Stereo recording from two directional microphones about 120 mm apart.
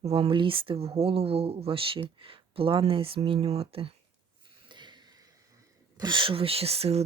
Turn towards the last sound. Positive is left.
turn(degrees=-60)  # may be behind; listen again after turning